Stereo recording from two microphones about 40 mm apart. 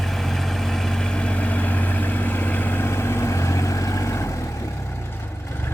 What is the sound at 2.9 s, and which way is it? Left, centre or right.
Vehicle, left.